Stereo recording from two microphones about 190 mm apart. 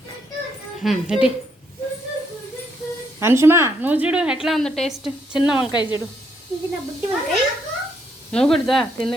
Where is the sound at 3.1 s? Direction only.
15° right (ahead or behind).